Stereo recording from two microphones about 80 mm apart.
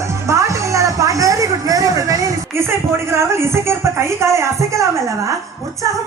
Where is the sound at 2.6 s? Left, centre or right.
Right.